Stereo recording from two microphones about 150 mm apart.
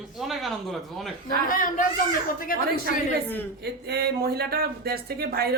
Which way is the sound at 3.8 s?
90° right.